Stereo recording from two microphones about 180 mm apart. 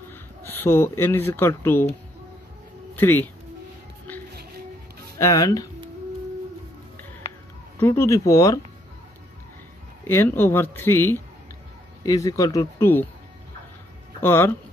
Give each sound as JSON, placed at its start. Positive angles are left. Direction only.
{"t": 0.1, "sound": "speech", "side_deg": 10}
{"t": 3.0, "sound": "speech", "side_deg": 10}
{"t": 5.2, "sound": "speech", "side_deg": 20}
{"t": 7.8, "sound": "speech", "side_deg": 15}
{"t": 10.0, "sound": "speech", "side_deg": 10}
{"t": 14.2, "sound": "speech", "side_deg": 15}